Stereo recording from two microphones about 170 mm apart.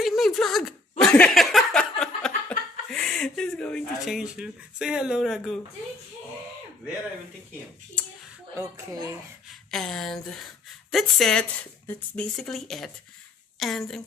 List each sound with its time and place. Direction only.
0.0 s a sound: centre (ahead or behind)
8.5 s speech: 20° right (ahead or behind)
9.5 s speech: 5° left (ahead or behind)